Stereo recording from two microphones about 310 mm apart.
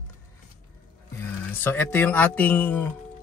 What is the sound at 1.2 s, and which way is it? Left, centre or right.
Speech, centre.